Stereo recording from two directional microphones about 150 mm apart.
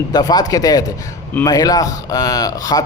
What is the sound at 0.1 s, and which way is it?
Speech, 25° left (ahead or behind).